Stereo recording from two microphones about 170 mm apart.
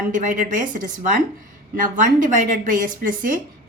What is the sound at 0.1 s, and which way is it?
A woman's voice, 50° right (ahead or behind).